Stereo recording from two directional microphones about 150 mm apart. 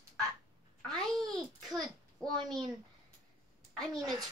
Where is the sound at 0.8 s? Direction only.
Centre (ahead or behind).